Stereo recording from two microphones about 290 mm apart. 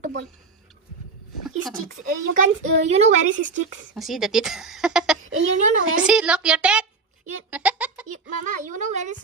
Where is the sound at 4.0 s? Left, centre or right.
Centre.